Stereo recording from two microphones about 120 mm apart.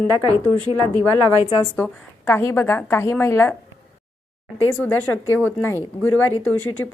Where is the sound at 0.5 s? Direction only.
40° right (ahead or behind).